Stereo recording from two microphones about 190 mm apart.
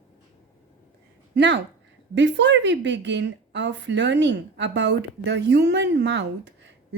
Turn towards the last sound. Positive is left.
turn(degrees=-70)  # may be behind; listen again after turning